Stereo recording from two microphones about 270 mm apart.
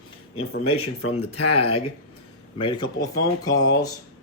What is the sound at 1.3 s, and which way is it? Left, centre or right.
Speech, left.